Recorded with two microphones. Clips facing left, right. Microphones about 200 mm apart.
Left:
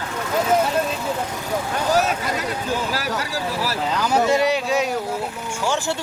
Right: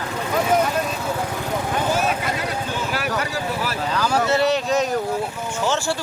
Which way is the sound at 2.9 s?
35° left (ahead or behind).